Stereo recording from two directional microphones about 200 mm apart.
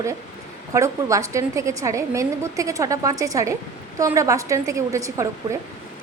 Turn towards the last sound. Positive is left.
turn(degrees=-15)  # may be behind; listen again after turning